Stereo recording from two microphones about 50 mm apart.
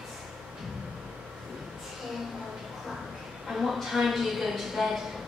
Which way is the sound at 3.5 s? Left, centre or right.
Centre.